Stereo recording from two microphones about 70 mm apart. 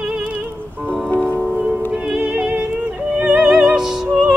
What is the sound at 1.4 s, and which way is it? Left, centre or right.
Music, centre.